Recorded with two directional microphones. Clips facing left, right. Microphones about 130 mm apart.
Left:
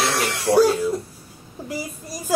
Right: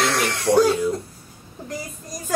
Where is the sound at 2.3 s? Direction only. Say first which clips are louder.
Left 2 dB; 10° left (ahead or behind).